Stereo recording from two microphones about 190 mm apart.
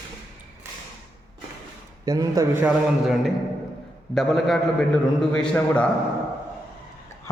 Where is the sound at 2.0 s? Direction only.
20° right (ahead or behind).